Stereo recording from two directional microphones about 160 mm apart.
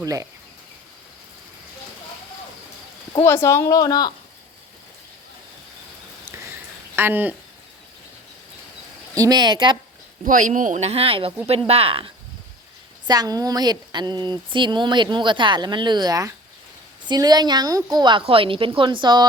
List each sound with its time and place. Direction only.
0.0 s speech: 20° right (ahead or behind)
3.2 s speech: 15° left (ahead or behind)
6.9 s speech: 15° right (ahead or behind)
9.1 s speech: 25° right (ahead or behind)
10.2 s speech: 55° right (ahead or behind); by 12.1 s 35° right (ahead or behind)
13.1 s speech: 25° right (ahead or behind)